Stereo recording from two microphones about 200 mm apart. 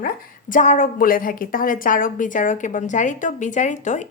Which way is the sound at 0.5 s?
40° left (ahead or behind).